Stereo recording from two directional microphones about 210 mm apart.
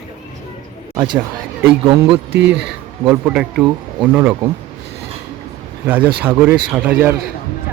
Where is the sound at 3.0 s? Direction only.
5° right (ahead or behind).